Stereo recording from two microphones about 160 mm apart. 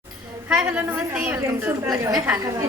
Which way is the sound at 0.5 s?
10° right (ahead or behind).